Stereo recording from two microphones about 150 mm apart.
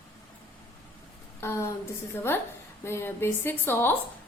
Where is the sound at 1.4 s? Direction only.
20° left (ahead or behind).